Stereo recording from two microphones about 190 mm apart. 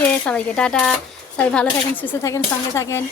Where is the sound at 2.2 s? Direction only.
15° left (ahead or behind).